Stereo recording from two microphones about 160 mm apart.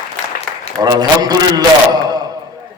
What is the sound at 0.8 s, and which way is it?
A man's voice, 25° right (ahead or behind).